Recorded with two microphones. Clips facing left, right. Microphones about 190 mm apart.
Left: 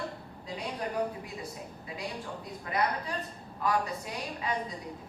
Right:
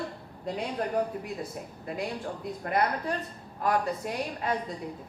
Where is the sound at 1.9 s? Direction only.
55° right (ahead or behind).